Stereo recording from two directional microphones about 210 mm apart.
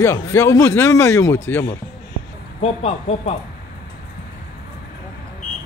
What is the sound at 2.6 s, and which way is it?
Speech, 30° left (ahead or behind).